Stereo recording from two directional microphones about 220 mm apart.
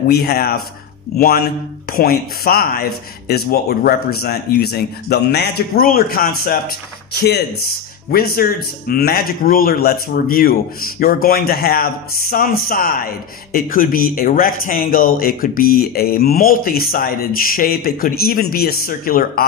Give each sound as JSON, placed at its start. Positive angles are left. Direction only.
{"t": 0.1, "sound": "a man's voice", "side_deg": 45}